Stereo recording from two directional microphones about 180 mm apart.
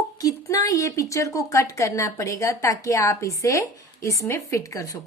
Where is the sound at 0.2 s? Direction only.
20° left (ahead or behind).